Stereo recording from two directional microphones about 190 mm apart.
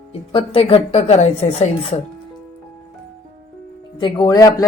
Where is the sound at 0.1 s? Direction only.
30° left (ahead or behind).